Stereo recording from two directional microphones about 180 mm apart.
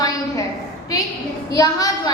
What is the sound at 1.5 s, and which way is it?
Speech, 20° left (ahead or behind).